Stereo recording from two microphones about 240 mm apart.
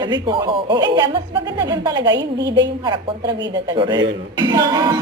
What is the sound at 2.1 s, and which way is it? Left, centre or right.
Speech, right.